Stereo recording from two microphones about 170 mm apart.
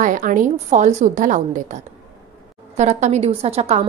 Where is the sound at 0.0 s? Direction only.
50° right (ahead or behind).